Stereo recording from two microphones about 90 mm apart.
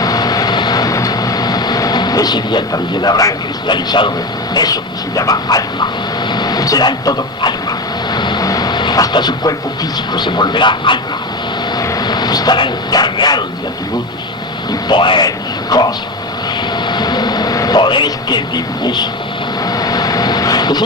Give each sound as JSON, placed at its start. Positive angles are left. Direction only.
{"t": 0.0, "sound": "vehicle", "side_deg": 45}
{"t": 3.7, "sound": "speech", "side_deg": 60}
{"t": 4.5, "sound": "speech", "side_deg": 45}
{"t": 8.1, "sound": "vehicle", "side_deg": 55}
{"t": 10.2, "sound": "speech", "side_deg": 55}
{"t": 11.8, "sound": "speech", "side_deg": 50}
{"t": 14.7, "sound": "speech", "side_deg": 55}
{"t": 15.7, "sound": "speech", "side_deg": 45}
{"t": 16.9, "sound": "vehicle", "side_deg": 50}